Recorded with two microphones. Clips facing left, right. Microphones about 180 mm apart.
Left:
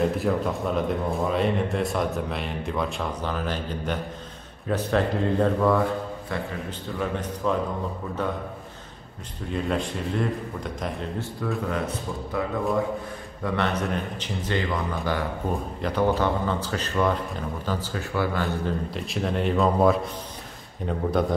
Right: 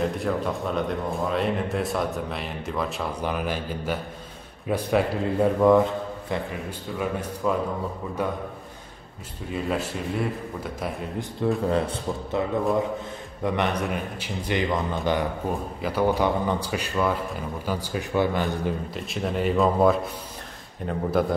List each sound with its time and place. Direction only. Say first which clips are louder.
0.0 s speech: left 2 dB; centre (ahead or behind)
3.2 s a man's voice: right 1 dB; 10° right (ahead or behind)
7.0 s a man's voice: even; 10° right (ahead or behind)
9.5 s speech: even; 5° right (ahead or behind)
11.4 s speech: right 5 dB; 30° right (ahead or behind)
13.4 s a man's voice: right 1 dB; 15° right (ahead or behind)
15.8 s a man's voice: right 1 dB; 5° right (ahead or behind)
18.9 s speech: even; centre (ahead or behind)